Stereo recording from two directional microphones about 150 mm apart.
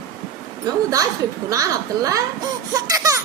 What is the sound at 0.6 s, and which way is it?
A woman's voice, 25° right (ahead or behind).